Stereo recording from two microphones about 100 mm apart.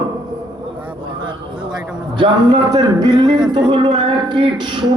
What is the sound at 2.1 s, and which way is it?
A woman's voice, 45° right (ahead or behind).